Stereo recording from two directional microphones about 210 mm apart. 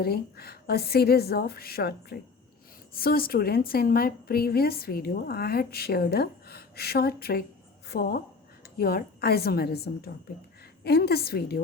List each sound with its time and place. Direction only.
0.0 s a woman's voice: 50° left (ahead or behind)